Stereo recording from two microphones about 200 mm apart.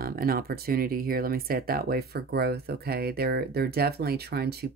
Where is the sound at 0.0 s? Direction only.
50° right (ahead or behind).